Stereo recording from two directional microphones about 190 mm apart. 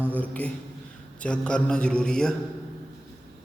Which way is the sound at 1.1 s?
5° left (ahead or behind).